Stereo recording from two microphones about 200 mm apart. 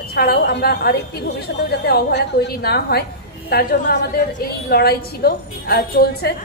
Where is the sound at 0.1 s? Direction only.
50° left (ahead or behind).